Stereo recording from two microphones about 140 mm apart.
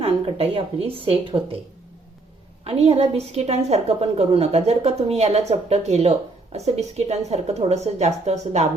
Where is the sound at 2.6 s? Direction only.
45° right (ahead or behind).